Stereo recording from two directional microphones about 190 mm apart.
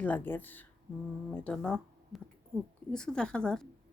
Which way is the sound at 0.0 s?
10° left (ahead or behind).